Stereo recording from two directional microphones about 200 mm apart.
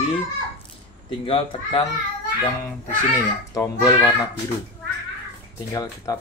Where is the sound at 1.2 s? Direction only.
25° left (ahead or behind).